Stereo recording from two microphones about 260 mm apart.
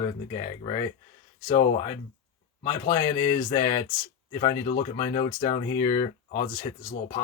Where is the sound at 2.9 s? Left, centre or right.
Centre.